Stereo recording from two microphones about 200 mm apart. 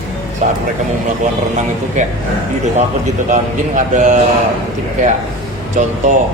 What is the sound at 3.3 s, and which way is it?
Speech, 40° right (ahead or behind).